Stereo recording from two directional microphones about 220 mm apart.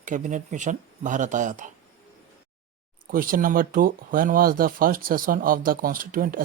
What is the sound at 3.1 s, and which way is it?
Speech, 40° right (ahead or behind).